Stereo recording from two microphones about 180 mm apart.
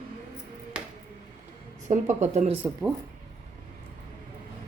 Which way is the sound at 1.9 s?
40° right (ahead or behind).